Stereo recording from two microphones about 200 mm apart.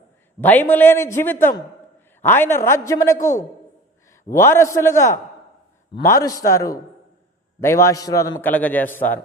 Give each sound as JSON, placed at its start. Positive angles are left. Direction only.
{"t": 0.4, "sound": "a man's voice", "side_deg": 10}